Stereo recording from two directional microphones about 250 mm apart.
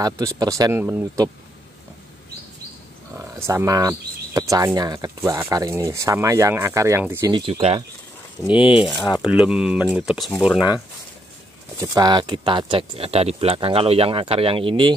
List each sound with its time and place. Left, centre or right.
0.0 s speech: centre
3.2 s speech: centre
8.4 s speech: centre
11.8 s speech: centre